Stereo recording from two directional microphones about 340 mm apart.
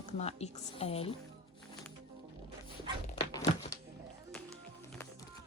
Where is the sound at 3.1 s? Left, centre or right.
Centre.